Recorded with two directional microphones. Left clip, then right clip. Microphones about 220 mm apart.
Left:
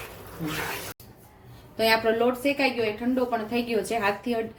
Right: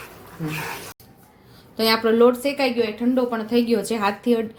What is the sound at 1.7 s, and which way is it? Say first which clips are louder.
Speech: right 4 dB; 35° right (ahead or behind).